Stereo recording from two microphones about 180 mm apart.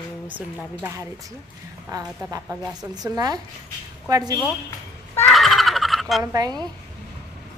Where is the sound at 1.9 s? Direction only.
20° right (ahead or behind).